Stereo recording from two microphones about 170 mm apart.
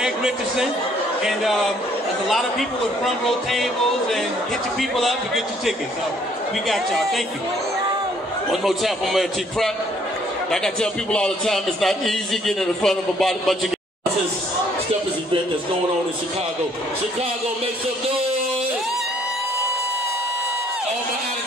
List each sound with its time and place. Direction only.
0.0 s a man's voice: 5° right (ahead or behind)
4.7 s a man's voice: centre (ahead or behind)
8.6 s a man's voice: centre (ahead or behind)